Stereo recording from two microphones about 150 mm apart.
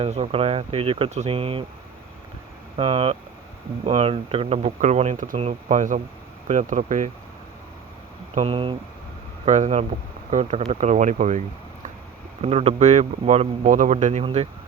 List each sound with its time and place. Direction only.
0.0 s speech: 40° right (ahead or behind)
2.7 s speech: 40° right (ahead or behind)
8.4 s speech: 40° right (ahead or behind)
9.5 s speech: 50° right (ahead or behind)